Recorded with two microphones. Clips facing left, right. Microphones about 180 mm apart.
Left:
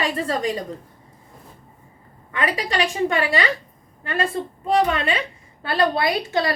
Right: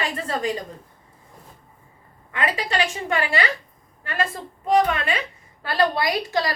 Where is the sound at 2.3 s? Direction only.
35° left (ahead or behind).